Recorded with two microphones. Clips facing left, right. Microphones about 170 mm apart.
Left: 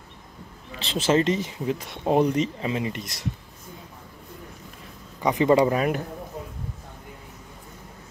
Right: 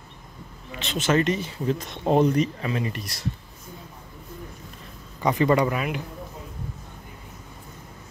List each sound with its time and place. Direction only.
0.7 s speech: 30° left (ahead or behind)
5.2 s speech: 15° left (ahead or behind)
5.7 s a man's voice: 40° left (ahead or behind)